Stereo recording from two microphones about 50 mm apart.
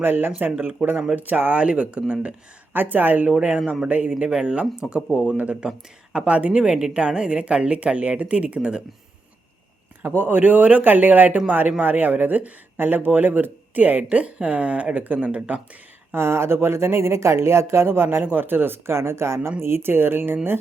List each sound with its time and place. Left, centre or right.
0.0 s speech: right
0.8 s speech: right
1.5 s a woman's voice: right
2.7 s speech: right
3.2 s a woman's voice: centre
3.8 s speech: right
4.2 s a woman's voice: centre
5.4 s a woman's voice: right
10.2 s a woman's voice: right
16.1 s speech: right